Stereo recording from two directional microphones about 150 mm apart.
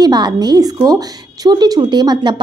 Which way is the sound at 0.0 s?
25° right (ahead or behind).